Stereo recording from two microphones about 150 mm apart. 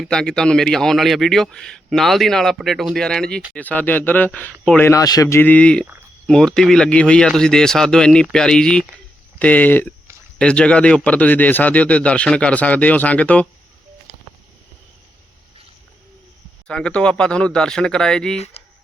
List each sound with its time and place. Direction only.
0.0 s a man's voice: 5° left (ahead or behind)
4.9 s a man's voice: 25° left (ahead or behind); by 13.5 s 10° left (ahead or behind)
16.6 s a man's voice: 5° left (ahead or behind)
18.3 s speech: 45° left (ahead or behind)